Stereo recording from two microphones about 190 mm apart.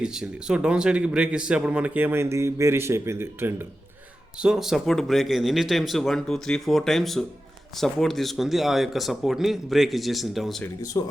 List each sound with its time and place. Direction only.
0.0 s speech: 5° right (ahead or behind)
4.4 s speech: centre (ahead or behind)
11.0 s speech: 20° left (ahead or behind)